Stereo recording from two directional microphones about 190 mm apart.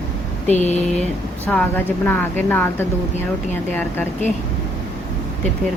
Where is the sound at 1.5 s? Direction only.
10° left (ahead or behind).